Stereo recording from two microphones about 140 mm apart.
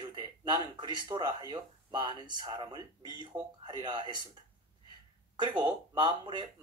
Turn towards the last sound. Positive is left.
turn(degrees=-30)  # may be behind; listen again after turning